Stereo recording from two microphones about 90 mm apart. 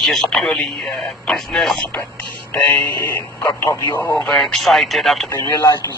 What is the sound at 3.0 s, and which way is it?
Speech, 25° left (ahead or behind).